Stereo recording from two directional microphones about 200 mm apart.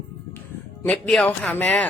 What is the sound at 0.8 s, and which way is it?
Speech, 5° left (ahead or behind).